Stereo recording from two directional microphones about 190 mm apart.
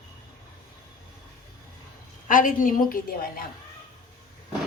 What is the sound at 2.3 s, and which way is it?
Speech, 45° left (ahead or behind).